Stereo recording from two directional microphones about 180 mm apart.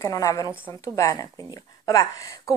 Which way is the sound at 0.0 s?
20° left (ahead or behind).